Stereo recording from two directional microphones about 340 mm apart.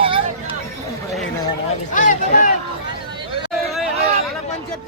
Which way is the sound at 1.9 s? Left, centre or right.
Left.